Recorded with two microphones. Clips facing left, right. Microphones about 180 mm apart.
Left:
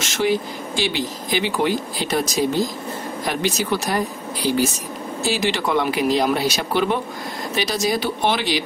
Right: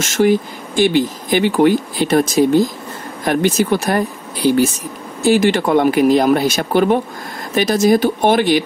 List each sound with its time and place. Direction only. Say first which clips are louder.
0.0 s speech: right 7 dB; 45° right (ahead or behind)